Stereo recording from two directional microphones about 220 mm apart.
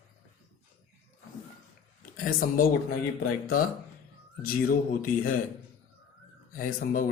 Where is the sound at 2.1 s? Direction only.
40° left (ahead or behind).